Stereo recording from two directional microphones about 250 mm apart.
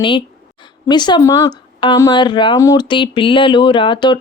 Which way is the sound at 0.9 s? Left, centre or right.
Centre.